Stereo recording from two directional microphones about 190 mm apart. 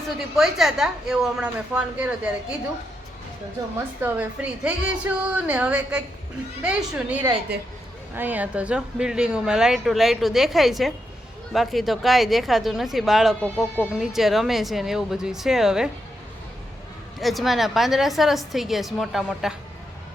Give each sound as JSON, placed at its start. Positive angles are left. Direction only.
{"t": 0.3, "sound": "speech", "side_deg": 0}
{"t": 3.8, "sound": "a woman's voice", "side_deg": -10}
{"t": 7.5, "sound": "speech", "side_deg": -60}
{"t": 8.1, "sound": "speech", "side_deg": -10}
{"t": 17.2, "sound": "speech", "side_deg": 0}